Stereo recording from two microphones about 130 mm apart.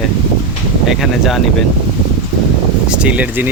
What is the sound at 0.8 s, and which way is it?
Speech, centre (ahead or behind).